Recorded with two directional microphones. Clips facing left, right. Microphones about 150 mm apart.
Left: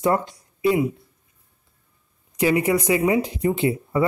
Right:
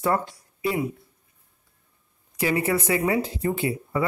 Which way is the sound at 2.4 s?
15° left (ahead or behind).